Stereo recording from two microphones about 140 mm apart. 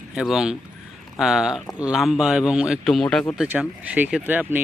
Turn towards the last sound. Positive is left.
turn(degrees=-10)  # may be behind; listen again after turning